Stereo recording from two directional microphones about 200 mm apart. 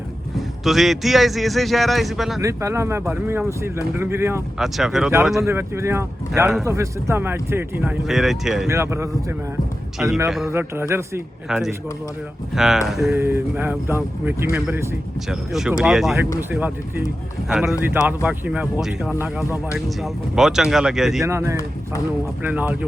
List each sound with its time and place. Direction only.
0.3 s speech: centre (ahead or behind)
2.4 s speech: 15° right (ahead or behind)
4.6 s speech: centre (ahead or behind)
5.5 s speech: 15° right (ahead or behind)
8.6 s speech: 15° right (ahead or behind)
10.2 s speech: centre (ahead or behind)
10.5 s speech: 10° right (ahead or behind)
11.4 s speech: centre (ahead or behind)
21.2 s speech: 15° right (ahead or behind)